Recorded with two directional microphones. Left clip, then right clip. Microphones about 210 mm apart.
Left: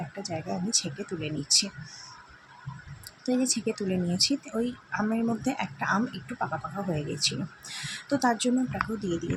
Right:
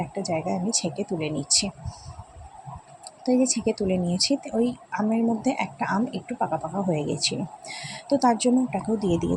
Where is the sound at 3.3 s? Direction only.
15° right (ahead or behind).